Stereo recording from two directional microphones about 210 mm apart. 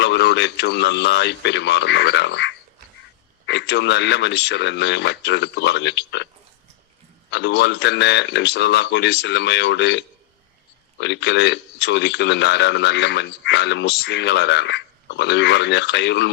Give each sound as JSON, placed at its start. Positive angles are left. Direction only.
{"t": 0.0, "sound": "speech", "side_deg": 55}
{"t": 7.3, "sound": "speech", "side_deg": 55}